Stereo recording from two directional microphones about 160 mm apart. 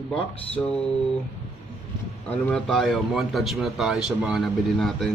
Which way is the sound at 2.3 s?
10° left (ahead or behind).